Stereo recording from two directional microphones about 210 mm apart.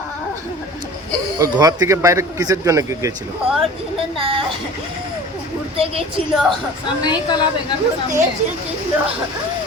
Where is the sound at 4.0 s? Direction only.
25° right (ahead or behind).